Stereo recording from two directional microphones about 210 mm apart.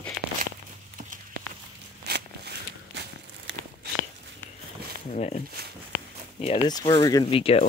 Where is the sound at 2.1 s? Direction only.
50° right (ahead or behind).